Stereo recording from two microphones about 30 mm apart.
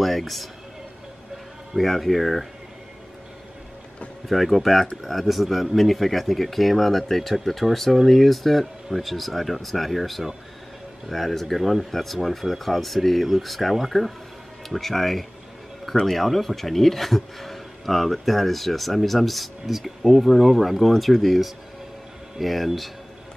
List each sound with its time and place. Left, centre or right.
0.0 s a man's voice: centre
1.8 s speech: centre
4.3 s speech: centre
14.7 s speech: centre